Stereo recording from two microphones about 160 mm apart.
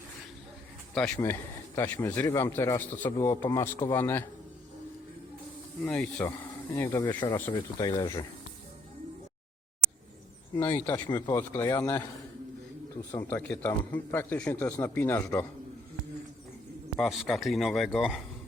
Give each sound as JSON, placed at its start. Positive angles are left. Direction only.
{"t": 0.9, "sound": "speech", "side_deg": 5}
{"t": 5.8, "sound": "speech", "side_deg": 10}
{"t": 10.8, "sound": "speech", "side_deg": 10}
{"t": 11.1, "sound": "speech", "side_deg": 25}
{"t": 13.1, "sound": "speech", "side_deg": 15}
{"t": 17.0, "sound": "speech", "side_deg": 0}